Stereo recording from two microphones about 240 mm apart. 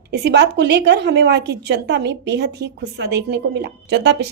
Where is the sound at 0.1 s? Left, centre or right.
Right.